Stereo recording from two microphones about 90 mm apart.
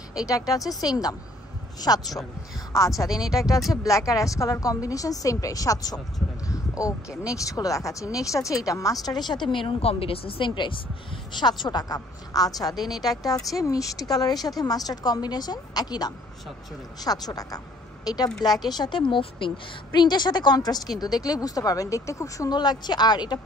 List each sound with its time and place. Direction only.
0.3 s a woman's voice: 40° left (ahead or behind)
3.1 s speech: 5° right (ahead or behind)
3.3 s a woman's voice: 40° left (ahead or behind)
6.5 s heart sounds: 40° left (ahead or behind)
7.3 s a woman's voice: 40° left (ahead or behind)
9.5 s a woman's voice: 75° left (ahead or behind); by 22.5 s 35° left (ahead or behind)
22.5 s a woman's voice: 50° left (ahead or behind)